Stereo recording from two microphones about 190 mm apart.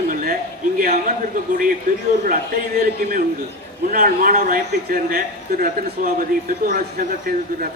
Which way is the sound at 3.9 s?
45° right (ahead or behind).